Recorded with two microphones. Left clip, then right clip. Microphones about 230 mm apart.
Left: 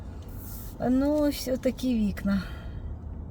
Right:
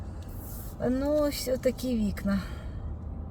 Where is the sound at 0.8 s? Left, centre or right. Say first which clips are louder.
Left 1 dB; centre.